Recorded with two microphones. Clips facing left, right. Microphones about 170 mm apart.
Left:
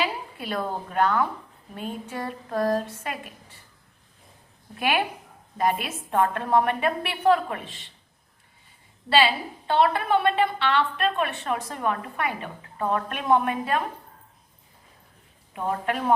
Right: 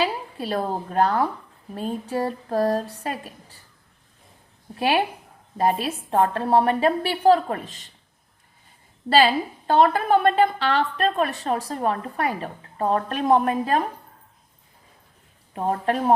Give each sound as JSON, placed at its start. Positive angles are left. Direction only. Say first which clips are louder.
{"t": 0.0, "sound": "a woman's voice", "louder": "right 4 dB", "side_deg": -35}
{"t": 4.8, "sound": "a woman's voice", "louder": "right 3 dB", "side_deg": -30}
{"t": 9.0, "sound": "a woman's voice", "louder": "right 3 dB", "side_deg": -40}
{"t": 15.5, "sound": "a woman's voice", "louder": "right 4 dB", "side_deg": -35}